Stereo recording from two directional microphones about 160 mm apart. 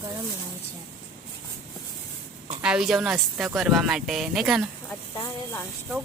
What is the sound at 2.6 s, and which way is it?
Speech, 5° right (ahead or behind).